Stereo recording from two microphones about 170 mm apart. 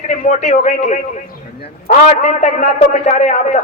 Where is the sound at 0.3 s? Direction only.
45° left (ahead or behind).